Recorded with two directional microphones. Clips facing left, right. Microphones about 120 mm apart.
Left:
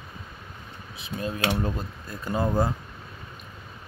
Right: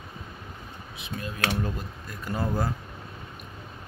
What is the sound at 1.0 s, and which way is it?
Speech, 30° left (ahead or behind).